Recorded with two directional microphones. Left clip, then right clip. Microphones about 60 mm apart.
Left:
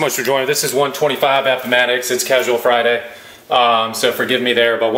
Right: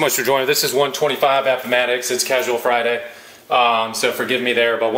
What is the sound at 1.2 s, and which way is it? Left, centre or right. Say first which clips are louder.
Speech: left 1 dB; centre.